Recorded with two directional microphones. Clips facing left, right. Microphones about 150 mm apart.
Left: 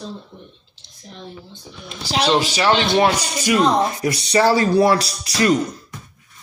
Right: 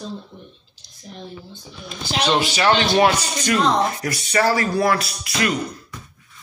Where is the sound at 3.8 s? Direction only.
25° left (ahead or behind).